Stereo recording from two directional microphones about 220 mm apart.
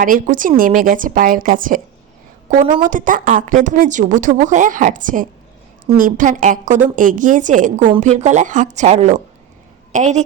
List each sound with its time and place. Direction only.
0.0 s a woman's voice: 35° right (ahead or behind)